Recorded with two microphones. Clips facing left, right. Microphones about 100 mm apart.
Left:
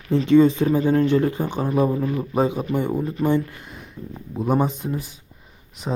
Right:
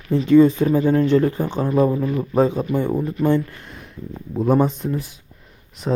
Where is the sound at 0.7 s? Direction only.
25° left (ahead or behind).